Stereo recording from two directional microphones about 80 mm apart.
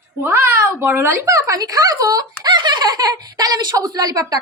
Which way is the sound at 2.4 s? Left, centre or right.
Right.